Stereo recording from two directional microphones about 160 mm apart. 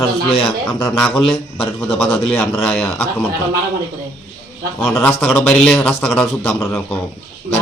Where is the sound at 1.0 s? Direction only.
15° left (ahead or behind).